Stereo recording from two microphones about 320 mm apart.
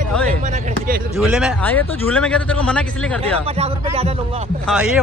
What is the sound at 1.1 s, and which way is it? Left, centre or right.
A man's voice, centre.